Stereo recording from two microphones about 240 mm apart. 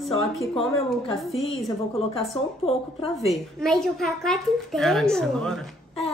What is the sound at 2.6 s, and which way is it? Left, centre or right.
Speech, left.